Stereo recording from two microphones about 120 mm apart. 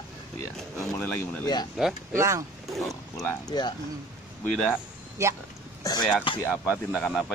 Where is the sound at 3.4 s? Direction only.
35° left (ahead or behind).